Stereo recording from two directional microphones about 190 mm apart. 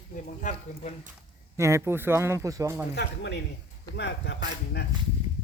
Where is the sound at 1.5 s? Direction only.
15° right (ahead or behind).